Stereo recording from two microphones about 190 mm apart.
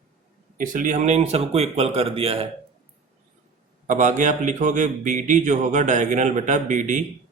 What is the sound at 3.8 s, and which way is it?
A man's voice, 40° right (ahead or behind).